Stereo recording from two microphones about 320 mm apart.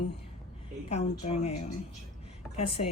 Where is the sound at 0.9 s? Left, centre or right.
Centre.